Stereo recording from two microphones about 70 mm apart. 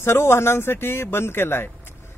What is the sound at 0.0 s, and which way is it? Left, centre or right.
Speech, left.